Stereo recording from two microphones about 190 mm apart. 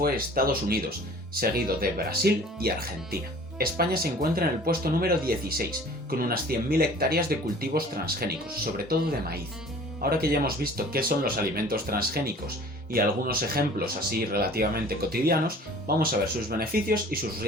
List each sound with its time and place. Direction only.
0.0 s speech: 50° right (ahead or behind)
10.0 s speech: 50° right (ahead or behind)